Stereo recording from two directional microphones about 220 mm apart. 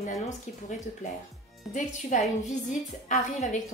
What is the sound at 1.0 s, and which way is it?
A woman's voice, 35° left (ahead or behind).